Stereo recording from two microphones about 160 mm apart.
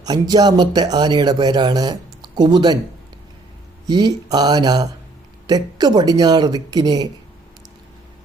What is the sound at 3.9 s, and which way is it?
Speech, 25° right (ahead or behind).